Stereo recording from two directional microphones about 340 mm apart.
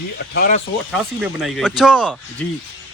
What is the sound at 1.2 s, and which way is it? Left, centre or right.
Speech, centre.